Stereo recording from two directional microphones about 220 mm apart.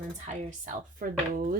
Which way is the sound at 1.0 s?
40° right (ahead or behind).